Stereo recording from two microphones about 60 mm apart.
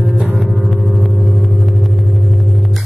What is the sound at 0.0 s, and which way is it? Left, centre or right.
Music, centre.